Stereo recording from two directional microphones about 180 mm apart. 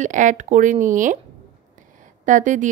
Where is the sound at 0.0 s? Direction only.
45° right (ahead or behind).